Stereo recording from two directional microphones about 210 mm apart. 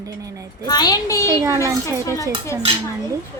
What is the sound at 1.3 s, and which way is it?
Speech, 15° right (ahead or behind).